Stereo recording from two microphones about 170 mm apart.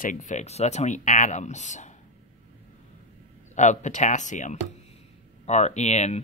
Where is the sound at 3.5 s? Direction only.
45° left (ahead or behind).